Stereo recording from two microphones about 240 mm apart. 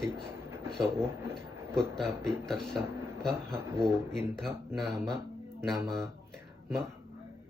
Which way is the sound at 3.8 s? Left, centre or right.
Centre.